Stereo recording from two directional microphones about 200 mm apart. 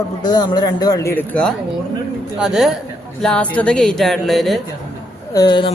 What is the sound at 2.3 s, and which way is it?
Speech, centre (ahead or behind).